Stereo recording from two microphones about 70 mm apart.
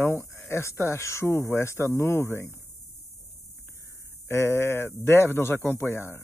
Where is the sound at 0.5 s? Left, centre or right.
Left.